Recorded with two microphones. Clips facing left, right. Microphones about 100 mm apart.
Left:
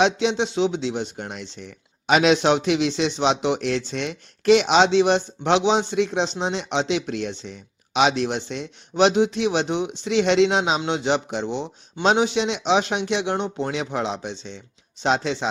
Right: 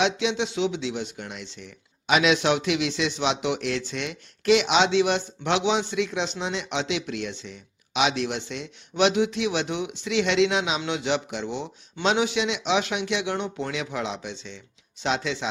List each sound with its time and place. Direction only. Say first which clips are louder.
0.0 s a man's voice: left 4 dB; 35° left (ahead or behind)